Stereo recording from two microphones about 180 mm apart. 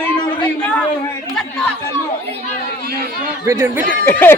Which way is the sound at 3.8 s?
50° right (ahead or behind).